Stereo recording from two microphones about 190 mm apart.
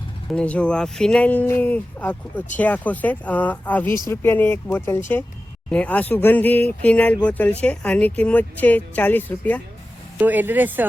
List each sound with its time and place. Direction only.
0.3 s speech: 5° left (ahead or behind)
10.2 s speech: 10° right (ahead or behind)